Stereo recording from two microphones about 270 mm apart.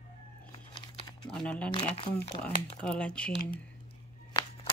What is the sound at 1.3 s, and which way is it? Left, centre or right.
Speech, centre.